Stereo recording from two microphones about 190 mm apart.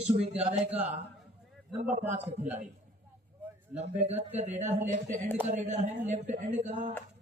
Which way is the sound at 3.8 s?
35° right (ahead or behind).